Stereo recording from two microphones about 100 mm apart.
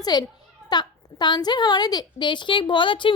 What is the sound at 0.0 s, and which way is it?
A woman's voice, 45° left (ahead or behind).